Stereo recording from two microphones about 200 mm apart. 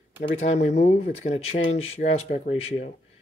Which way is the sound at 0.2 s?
35° left (ahead or behind).